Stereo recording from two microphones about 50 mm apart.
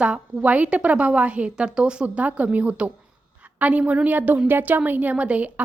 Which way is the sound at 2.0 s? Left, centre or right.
Right.